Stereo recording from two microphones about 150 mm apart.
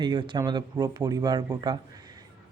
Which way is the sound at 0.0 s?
30° right (ahead or behind).